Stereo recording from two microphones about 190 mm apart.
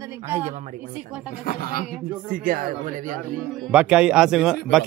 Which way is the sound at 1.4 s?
50° left (ahead or behind).